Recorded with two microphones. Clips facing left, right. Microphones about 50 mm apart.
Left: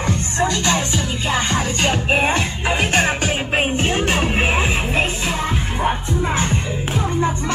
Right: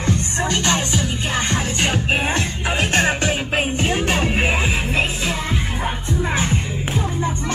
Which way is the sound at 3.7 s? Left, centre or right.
Left.